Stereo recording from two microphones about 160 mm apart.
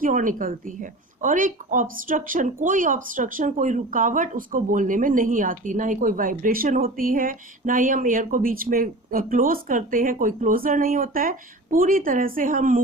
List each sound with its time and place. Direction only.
0.0 s speech: 55° right (ahead or behind)